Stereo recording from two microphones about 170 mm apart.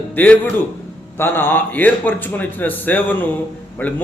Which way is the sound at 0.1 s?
10° left (ahead or behind).